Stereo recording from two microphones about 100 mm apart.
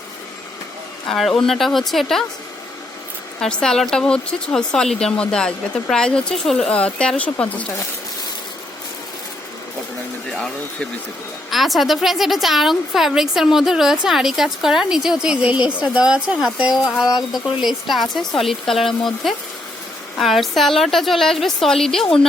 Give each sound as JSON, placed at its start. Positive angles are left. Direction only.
{"t": 1.0, "sound": "a woman's voice", "side_deg": 5}
{"t": 3.4, "sound": "speech", "side_deg": 5}
{"t": 11.5, "sound": "a woman's voice", "side_deg": 0}
{"t": 17.0, "sound": "speech", "side_deg": 40}
{"t": 17.3, "sound": "a woman's voice", "side_deg": 0}